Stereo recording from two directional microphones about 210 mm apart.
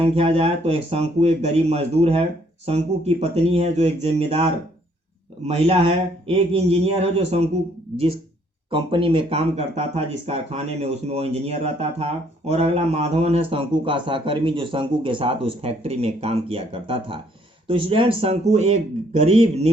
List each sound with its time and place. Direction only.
0.0 s speech: 25° right (ahead or behind)